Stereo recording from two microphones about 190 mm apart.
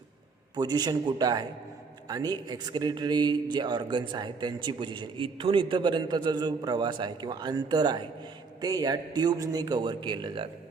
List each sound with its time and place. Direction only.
0.5 s a man's voice: 20° right (ahead or behind)